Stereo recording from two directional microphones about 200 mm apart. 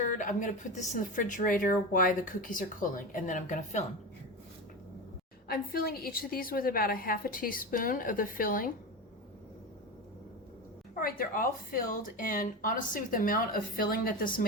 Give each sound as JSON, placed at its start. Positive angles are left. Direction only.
{"t": 0.0, "sound": "a woman's voice", "side_deg": 40}
{"t": 5.5, "sound": "speech", "side_deg": 50}
{"t": 10.9, "sound": "speech", "side_deg": 45}